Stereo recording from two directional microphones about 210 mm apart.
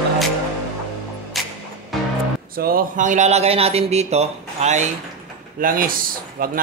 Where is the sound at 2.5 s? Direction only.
45° right (ahead or behind).